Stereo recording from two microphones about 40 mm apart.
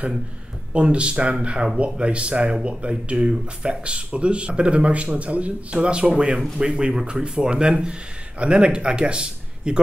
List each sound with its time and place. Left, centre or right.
0.7 s speech: right